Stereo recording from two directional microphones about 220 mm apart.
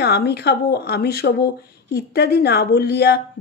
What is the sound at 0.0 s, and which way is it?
Speech, 45° left (ahead or behind).